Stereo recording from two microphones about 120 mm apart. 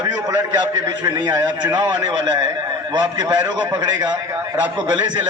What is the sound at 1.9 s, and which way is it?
A man's voice, 35° right (ahead or behind).